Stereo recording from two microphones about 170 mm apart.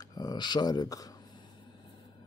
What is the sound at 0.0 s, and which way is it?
Speech, 20° left (ahead or behind).